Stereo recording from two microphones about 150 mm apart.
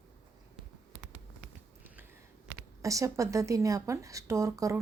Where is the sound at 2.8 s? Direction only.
20° right (ahead or behind).